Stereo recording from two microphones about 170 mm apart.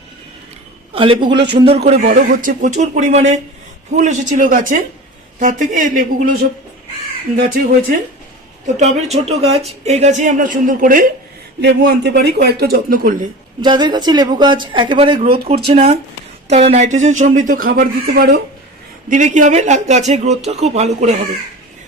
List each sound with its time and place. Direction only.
0.9 s speech: 30° right (ahead or behind)
2.0 s speech: 55° right (ahead or behind)
8.6 s speech: 40° right (ahead or behind)
11.6 s speech: 85° right; by 13.2 s 55° right (ahead or behind)
13.6 s speech: 25° right (ahead or behind); by 18.3 s 65° right (ahead or behind)
19.0 s speech: 45° right (ahead or behind)